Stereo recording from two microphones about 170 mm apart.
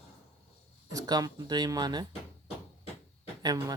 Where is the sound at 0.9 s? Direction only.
20° right (ahead or behind).